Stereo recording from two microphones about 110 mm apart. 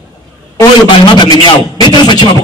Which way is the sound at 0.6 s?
45° left (ahead or behind).